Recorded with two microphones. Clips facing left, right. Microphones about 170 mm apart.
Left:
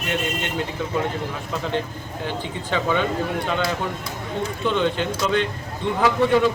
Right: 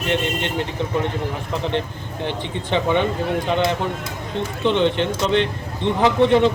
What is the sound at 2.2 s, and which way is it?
Speech, 20° right (ahead or behind).